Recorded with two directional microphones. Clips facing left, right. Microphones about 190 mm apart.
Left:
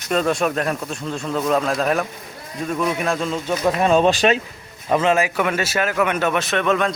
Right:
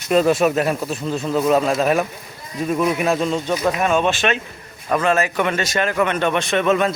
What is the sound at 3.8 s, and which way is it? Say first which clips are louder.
Speech: left 3 dB; 35° left (ahead or behind).